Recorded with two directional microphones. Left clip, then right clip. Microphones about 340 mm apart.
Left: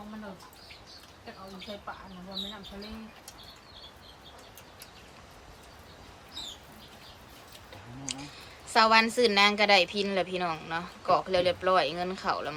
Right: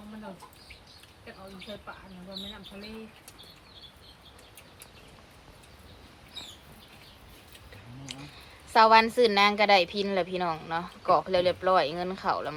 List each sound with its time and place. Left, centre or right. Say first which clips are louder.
8.0 s a woman's voice: left 4 dB; centre